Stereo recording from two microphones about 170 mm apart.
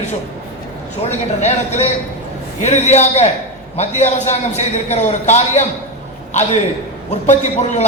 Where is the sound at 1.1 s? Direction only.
40° left (ahead or behind).